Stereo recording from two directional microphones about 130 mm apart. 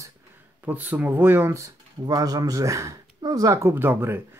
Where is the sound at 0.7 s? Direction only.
15° right (ahead or behind).